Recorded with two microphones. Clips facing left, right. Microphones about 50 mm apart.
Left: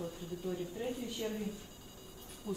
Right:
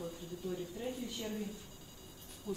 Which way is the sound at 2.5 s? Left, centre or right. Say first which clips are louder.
Left 1 dB; left.